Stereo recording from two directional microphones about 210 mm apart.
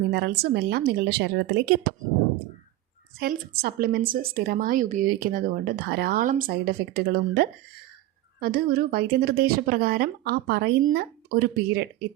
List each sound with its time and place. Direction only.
0.1 s a woman's voice: 50° right (ahead or behind)
3.2 s a woman's voice: 45° right (ahead or behind)